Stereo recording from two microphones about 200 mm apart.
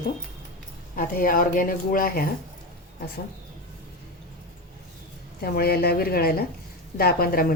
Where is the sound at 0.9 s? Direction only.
45° left (ahead or behind).